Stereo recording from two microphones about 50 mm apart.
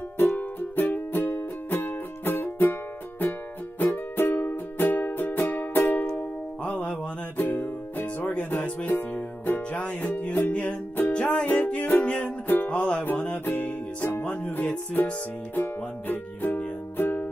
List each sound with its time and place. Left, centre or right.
0.2 s music: left
6.6 s music: left
11.4 s music: left
13.0 s music: left